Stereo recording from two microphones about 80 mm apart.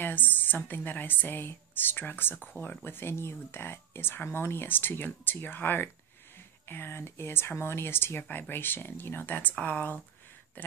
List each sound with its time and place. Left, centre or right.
0.0 s speech: left